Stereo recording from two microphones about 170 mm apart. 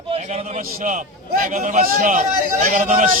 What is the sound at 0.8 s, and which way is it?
A man's voice, 55° right (ahead or behind).